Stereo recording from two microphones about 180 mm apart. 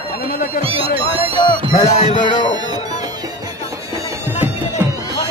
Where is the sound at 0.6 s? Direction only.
30° right (ahead or behind).